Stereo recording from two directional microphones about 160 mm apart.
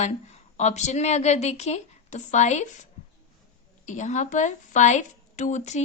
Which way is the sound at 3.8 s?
50° left (ahead or behind).